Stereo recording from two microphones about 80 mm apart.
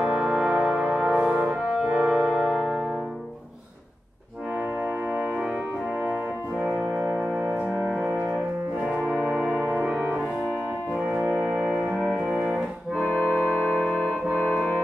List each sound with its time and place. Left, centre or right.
0.0 s brass instrument: centre
6.6 s music: right
8.8 s brass instrument: right
11.2 s music: centre